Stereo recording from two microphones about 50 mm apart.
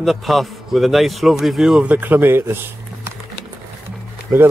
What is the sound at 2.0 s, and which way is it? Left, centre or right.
Speech, right.